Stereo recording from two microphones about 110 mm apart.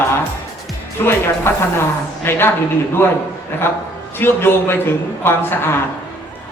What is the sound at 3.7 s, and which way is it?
A man's voice, 20° left (ahead or behind).